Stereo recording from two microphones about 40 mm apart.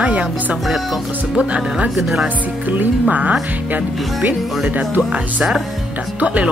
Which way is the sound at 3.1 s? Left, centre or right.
Right.